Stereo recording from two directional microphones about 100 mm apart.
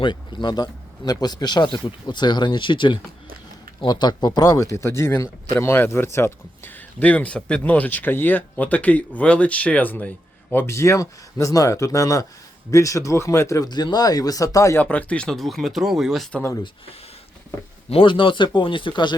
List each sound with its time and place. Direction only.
0.0 s a man's voice: 50° left (ahead or behind); by 13.7 s 30° left (ahead or behind)
13.7 s speech: 45° left (ahead or behind)
14.8 s speech: 15° left (ahead or behind); by 16.3 s centre (ahead or behind)
17.8 s speech: 60° left (ahead or behind)